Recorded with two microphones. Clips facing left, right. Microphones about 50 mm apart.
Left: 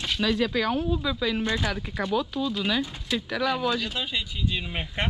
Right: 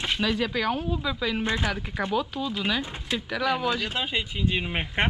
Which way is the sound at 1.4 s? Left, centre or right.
Right.